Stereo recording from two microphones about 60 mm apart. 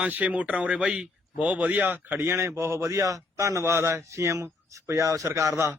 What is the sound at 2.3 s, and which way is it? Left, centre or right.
A man's voice, right.